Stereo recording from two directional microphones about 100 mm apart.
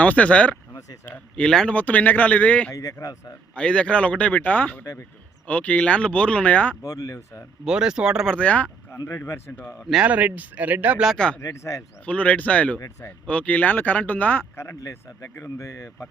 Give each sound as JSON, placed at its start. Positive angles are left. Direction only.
{"t": 0.0, "sound": "speech", "side_deg": 15}
{"t": 0.7, "sound": "a sound", "side_deg": 35}
{"t": 1.4, "sound": "speech", "side_deg": 5}
{"t": 2.7, "sound": "speech", "side_deg": 35}
{"t": 3.5, "sound": "speech", "side_deg": 10}
{"t": 6.8, "sound": "speech", "side_deg": 35}
{"t": 7.6, "sound": "speech", "side_deg": -5}
{"t": 8.3, "sound": "speech", "side_deg": 15}
{"t": 9.0, "sound": "speech", "side_deg": 30}
{"t": 9.5, "sound": "speech", "side_deg": 20}
{"t": 9.9, "sound": "speech", "side_deg": -10}
{"t": 11.3, "sound": "speech", "side_deg": 30}
{"t": 12.0, "sound": "speech", "side_deg": 15}